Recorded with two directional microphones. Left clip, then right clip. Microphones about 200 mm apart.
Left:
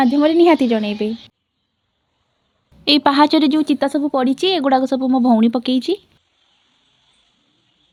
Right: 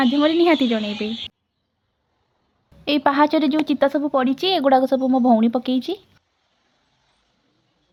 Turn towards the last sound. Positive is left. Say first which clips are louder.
# left 4 dB
turn(degrees=20)  # may be behind; listen again after turning